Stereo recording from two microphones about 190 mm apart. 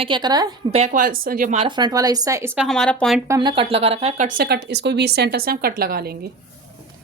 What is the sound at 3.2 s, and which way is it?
Speech, 20° right (ahead or behind).